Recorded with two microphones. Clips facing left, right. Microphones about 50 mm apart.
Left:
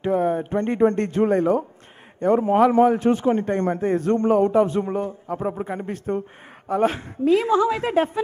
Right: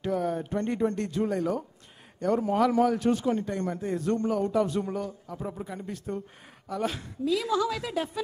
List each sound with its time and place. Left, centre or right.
0.0 s a man's voice: left